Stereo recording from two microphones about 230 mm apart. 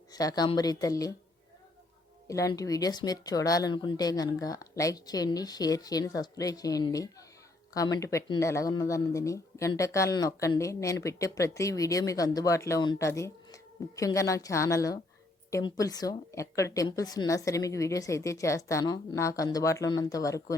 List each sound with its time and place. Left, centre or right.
0.1 s speech: centre
2.2 s speech: centre